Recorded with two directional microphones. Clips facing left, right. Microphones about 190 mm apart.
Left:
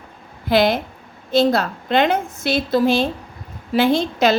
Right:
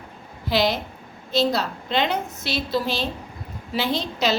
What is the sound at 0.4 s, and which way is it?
A woman's voice, 55° left (ahead or behind).